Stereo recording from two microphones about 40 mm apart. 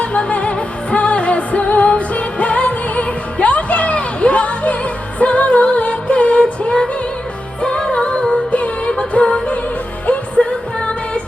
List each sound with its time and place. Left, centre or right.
0.0 s music: left
8.5 s music: left